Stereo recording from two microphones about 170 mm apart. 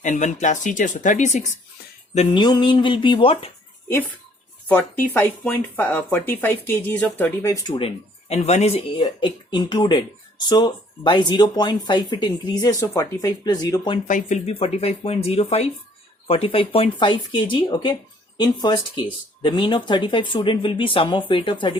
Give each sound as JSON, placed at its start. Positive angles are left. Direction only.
{"t": 0.0, "sound": "speech", "side_deg": 45}
{"t": 2.3, "sound": "speech", "side_deg": 25}
{"t": 4.7, "sound": "speech", "side_deg": 10}
{"t": 7.8, "sound": "speech", "side_deg": 35}
{"t": 14.1, "sound": "speech", "side_deg": 45}